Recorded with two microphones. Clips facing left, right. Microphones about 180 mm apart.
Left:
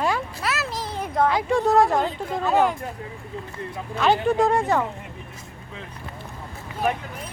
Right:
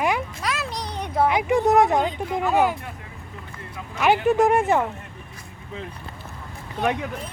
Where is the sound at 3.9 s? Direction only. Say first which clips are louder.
Right 1 dB; 15° right (ahead or behind).